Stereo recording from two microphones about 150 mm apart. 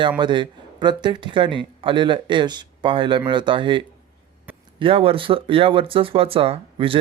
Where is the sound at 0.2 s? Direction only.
30° right (ahead or behind).